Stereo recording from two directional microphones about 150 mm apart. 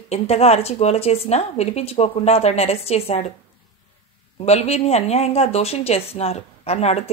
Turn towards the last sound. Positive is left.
turn(degrees=45)  # may be behind; listen again after turning